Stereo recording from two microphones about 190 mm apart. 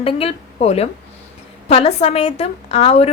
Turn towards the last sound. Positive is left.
turn(degrees=35)  # may be behind; listen again after turning